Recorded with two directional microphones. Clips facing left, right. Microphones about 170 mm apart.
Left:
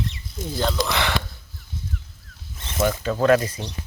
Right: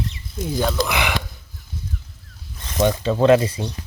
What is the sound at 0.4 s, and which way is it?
Speech, 10° right (ahead or behind).